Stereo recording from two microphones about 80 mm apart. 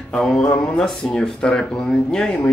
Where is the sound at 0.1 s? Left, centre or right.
Centre.